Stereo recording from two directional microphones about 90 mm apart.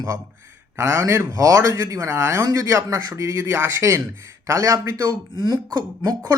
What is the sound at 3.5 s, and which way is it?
Speech, 25° right (ahead or behind).